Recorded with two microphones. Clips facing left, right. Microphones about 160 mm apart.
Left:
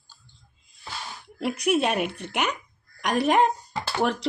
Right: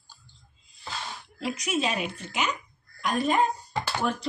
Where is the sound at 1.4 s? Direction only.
60° left (ahead or behind).